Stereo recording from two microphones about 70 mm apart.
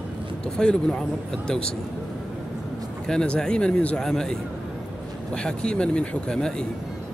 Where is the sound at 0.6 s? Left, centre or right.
Centre.